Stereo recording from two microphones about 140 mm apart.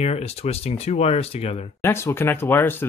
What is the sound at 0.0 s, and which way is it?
Speech, 50° left (ahead or behind).